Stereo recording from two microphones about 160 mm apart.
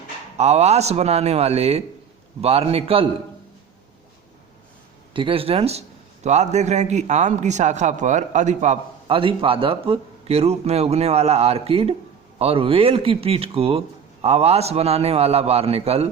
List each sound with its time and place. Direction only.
0.3 s a man's voice: 45° right (ahead or behind)
5.1 s a man's voice: 35° right (ahead or behind)